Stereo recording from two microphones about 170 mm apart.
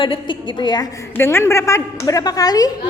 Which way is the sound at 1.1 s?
15° left (ahead or behind).